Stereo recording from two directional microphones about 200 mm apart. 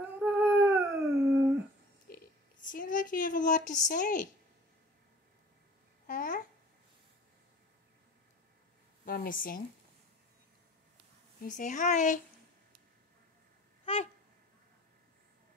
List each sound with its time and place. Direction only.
0.0 s humming: 5° right (ahead or behind)
2.0 s a sound: 45° left (ahead or behind)
6.0 s babbling: 45° left (ahead or behind)
9.0 s speech: 45° left (ahead or behind)
11.4 s speech: 40° left (ahead or behind)